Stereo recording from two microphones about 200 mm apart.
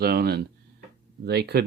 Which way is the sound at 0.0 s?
50° right (ahead or behind).